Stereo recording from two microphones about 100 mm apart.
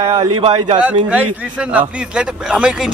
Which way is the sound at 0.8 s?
15° right (ahead or behind).